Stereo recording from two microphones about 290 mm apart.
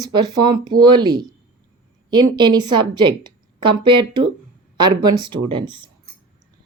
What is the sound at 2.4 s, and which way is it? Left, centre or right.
Speech, centre.